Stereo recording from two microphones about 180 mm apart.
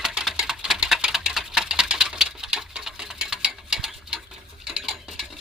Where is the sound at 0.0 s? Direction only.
5° right (ahead or behind).